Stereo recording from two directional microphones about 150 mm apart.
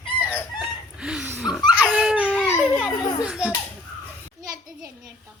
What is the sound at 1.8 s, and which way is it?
Dog, 5° right (ahead or behind).